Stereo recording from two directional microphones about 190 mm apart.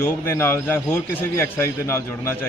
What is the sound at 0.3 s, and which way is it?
A man's voice, 10° left (ahead or behind).